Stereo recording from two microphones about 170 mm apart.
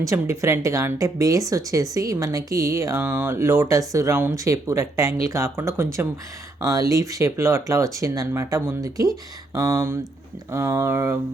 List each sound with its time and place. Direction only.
0.0 s speech: 15° right (ahead or behind)